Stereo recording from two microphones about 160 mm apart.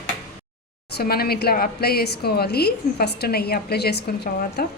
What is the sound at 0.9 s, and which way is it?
A woman's voice, 75° left (ahead or behind).